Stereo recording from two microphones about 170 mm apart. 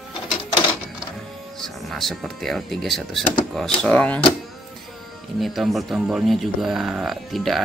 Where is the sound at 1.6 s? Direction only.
Centre (ahead or behind).